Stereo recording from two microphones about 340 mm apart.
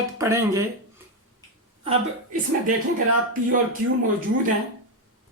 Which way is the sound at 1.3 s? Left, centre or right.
Centre.